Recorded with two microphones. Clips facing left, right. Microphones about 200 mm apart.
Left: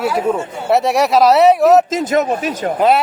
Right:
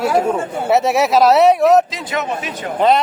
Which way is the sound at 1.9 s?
45° left (ahead or behind).